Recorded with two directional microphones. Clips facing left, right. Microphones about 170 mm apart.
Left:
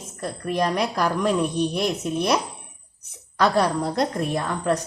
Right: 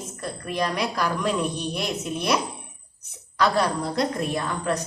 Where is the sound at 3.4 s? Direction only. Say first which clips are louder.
Left 2 dB; 45° left (ahead or behind).